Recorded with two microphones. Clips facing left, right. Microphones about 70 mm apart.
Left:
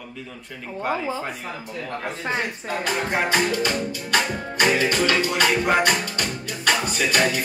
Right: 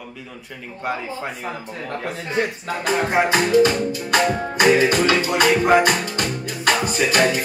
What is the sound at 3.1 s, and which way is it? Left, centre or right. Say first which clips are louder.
Speech: right 5 dB; centre.